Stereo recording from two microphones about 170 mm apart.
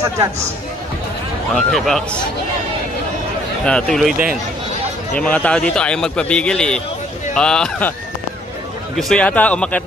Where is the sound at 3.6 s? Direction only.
5° left (ahead or behind).